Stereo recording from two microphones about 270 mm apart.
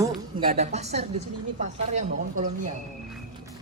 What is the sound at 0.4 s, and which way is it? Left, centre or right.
Speech, right.